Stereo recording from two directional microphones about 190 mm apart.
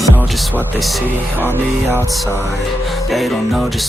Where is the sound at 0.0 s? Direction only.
10° right (ahead or behind).